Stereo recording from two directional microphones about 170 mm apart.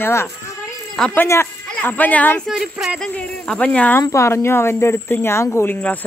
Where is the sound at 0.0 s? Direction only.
15° left (ahead or behind).